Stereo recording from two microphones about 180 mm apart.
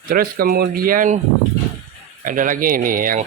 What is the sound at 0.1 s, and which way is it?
Speech, 55° right (ahead or behind).